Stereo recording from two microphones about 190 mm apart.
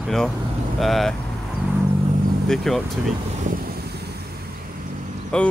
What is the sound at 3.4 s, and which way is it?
Vehicle, 50° right (ahead or behind).